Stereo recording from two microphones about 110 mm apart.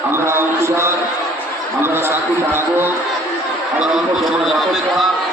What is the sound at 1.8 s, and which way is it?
Speech, 20° right (ahead or behind).